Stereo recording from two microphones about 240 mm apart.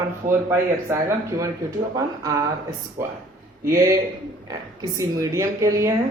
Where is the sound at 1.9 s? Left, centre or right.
Centre.